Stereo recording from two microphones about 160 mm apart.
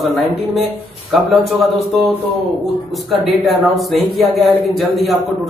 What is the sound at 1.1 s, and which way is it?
A man's voice, centre (ahead or behind).